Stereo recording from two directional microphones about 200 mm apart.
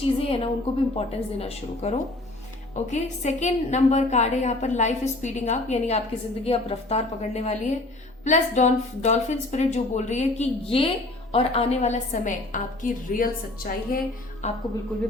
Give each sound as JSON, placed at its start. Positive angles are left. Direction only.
{"t": 0.0, "sound": "a woman's voice", "side_deg": 30}
{"t": 14.4, "sound": "a woman's voice", "side_deg": 35}